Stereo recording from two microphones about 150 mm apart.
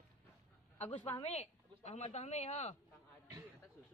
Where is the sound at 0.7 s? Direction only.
45° left (ahead or behind).